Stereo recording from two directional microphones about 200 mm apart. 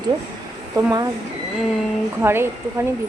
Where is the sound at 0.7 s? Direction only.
20° right (ahead or behind).